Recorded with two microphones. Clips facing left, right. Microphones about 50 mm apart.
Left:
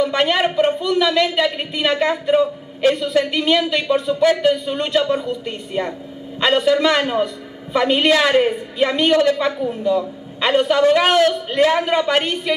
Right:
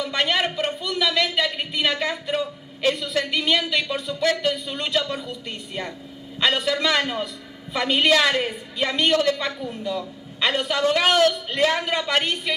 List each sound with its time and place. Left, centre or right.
0.0 s a man's voice: centre
2.3 s a woman's voice: left
3.3 s a man's voice: centre
7.7 s a man's voice: centre
9.1 s a man's voice: left
10.4 s a man's voice: centre